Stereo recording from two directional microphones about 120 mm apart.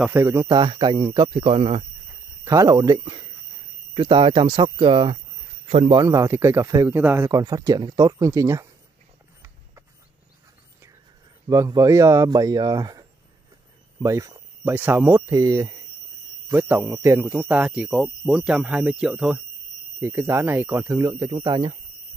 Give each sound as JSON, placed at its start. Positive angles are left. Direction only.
{"t": 0.1, "sound": "speech", "side_deg": -25}
{"t": 0.6, "sound": "speech", "side_deg": -40}
{"t": 2.4, "sound": "speech", "side_deg": -30}
{"t": 6.0, "sound": "speech", "side_deg": -25}
{"t": 7.0, "sound": "speech", "side_deg": -15}
{"t": 7.2, "sound": "speech", "side_deg": -30}
{"t": 11.4, "sound": "speech", "side_deg": -30}
{"t": 13.9, "sound": "a sound", "side_deg": -25}
{"t": 14.7, "sound": "speech", "side_deg": -15}
{"t": 16.5, "sound": "speech", "side_deg": -15}
{"t": 17.6, "sound": "speech", "side_deg": -10}
{"t": 20.0, "sound": "speech", "side_deg": -20}